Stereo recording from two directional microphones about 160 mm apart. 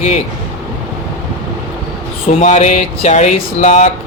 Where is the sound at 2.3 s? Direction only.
45° left (ahead or behind).